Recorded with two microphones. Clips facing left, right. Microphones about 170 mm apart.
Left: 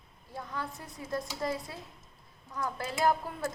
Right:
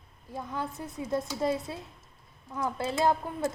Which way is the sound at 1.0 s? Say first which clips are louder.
Right 5 dB; 25° right (ahead or behind).